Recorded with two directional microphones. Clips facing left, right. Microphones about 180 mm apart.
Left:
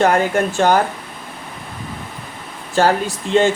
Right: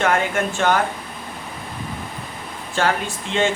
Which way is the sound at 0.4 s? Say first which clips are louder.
Left 5 dB; 35° left (ahead or behind).